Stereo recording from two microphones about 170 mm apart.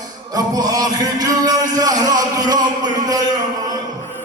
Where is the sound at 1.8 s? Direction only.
20° right (ahead or behind).